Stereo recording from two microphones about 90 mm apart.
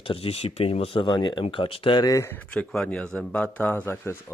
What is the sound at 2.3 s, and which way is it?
Speech, 20° left (ahead or behind).